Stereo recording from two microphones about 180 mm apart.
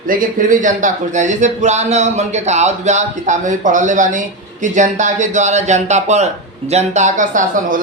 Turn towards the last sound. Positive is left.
turn(degrees=-45)  # may be behind; listen again after turning